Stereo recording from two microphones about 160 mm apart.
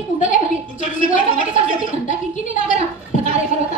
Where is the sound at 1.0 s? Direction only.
55° left (ahead or behind).